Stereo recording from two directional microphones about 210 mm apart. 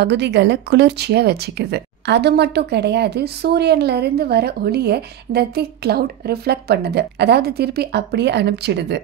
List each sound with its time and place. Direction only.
0.0 s speech: 55° right (ahead or behind)